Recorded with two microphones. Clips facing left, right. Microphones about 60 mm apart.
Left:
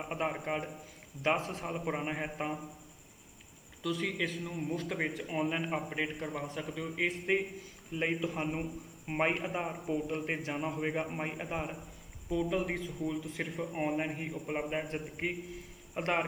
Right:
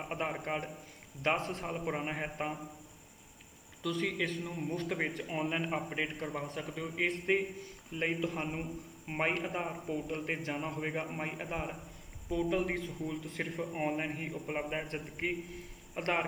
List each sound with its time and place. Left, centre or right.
0.0 s a man's voice: centre
3.8 s a man's voice: centre